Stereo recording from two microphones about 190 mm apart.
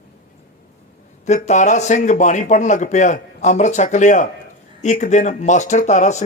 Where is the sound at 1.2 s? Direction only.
40° left (ahead or behind).